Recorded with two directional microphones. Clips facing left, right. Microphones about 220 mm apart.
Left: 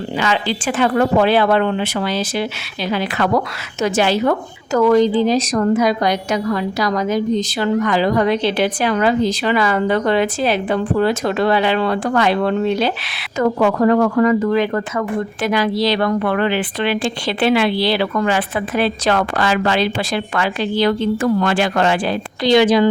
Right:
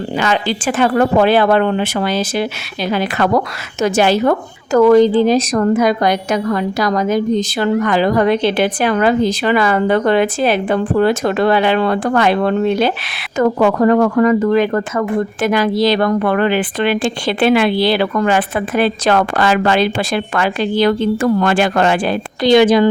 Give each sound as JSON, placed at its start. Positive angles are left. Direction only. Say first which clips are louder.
{"t": 0.2, "sound": "speech", "louder": "right 2 dB", "side_deg": -50}